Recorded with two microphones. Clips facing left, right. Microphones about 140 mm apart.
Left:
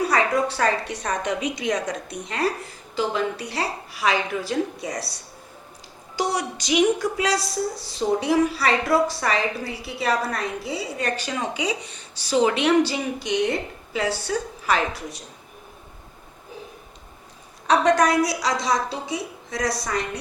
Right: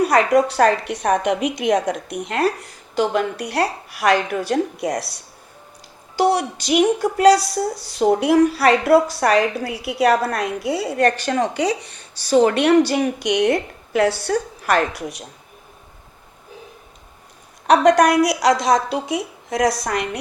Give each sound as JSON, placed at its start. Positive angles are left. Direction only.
{"t": 0.1, "sound": "a woman's voice", "side_deg": -75}
{"t": 6.1, "sound": "a woman's voice", "side_deg": -60}
{"t": 17.7, "sound": "a woman's voice", "side_deg": -70}